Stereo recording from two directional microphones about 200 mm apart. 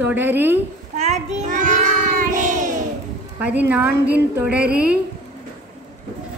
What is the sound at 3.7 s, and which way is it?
A woman's voice, 10° right (ahead or behind).